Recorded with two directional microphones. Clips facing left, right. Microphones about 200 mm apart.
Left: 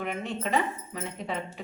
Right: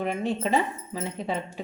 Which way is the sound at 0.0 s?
30° right (ahead or behind).